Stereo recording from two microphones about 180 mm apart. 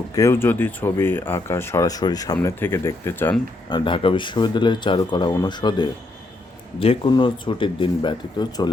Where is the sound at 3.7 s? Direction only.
25° left (ahead or behind).